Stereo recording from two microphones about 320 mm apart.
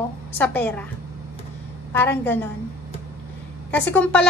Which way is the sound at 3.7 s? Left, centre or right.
Centre.